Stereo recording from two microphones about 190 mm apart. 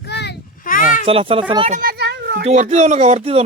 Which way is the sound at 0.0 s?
60° left (ahead or behind).